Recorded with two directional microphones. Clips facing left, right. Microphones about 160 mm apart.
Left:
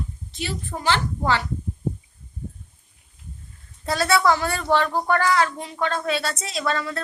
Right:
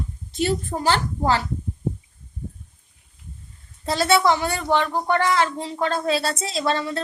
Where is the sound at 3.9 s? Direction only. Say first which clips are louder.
Right 1 dB; 25° right (ahead or behind).